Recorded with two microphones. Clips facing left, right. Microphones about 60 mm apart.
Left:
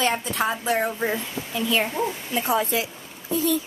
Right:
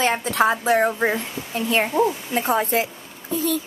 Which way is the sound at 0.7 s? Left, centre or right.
Right.